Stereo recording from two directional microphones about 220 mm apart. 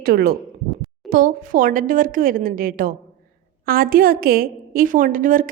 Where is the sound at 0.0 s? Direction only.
40° right (ahead or behind).